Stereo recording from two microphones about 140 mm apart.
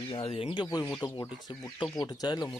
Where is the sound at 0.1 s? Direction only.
40° left (ahead or behind).